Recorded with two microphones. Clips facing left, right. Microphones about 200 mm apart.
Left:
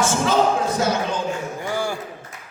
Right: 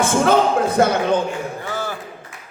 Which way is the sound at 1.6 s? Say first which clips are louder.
Left 5 dB; 15° left (ahead or behind).